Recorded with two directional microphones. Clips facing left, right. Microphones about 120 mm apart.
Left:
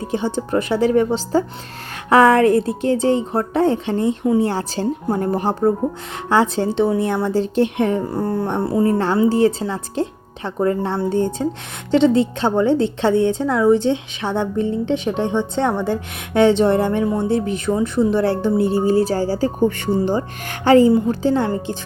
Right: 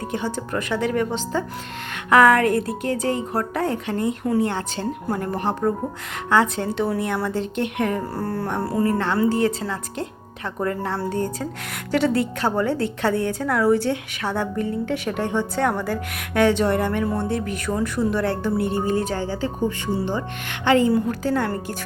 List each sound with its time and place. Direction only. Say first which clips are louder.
0.0 s a woman's voice: left 5 dB; 30° left (ahead or behind)
8.1 s a sound: left 5 dB; 15° left (ahead or behind)
8.4 s a woman's voice: left 3 dB; 25° left (ahead or behind)
20.9 s a woman's voice: left 5 dB; 25° left (ahead or behind)